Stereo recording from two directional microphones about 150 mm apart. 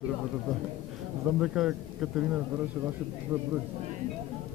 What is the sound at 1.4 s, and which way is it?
Speech, 5° right (ahead or behind).